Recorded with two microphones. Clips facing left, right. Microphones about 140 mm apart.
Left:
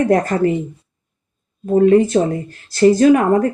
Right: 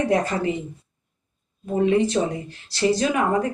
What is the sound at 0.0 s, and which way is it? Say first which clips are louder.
Speech: left 7 dB; 50° left (ahead or behind).